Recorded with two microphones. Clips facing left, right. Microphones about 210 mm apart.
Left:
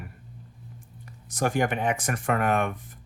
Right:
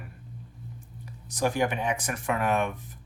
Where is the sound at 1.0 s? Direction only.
55° left (ahead or behind).